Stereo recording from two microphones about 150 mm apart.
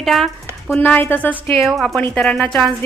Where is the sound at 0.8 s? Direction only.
15° left (ahead or behind).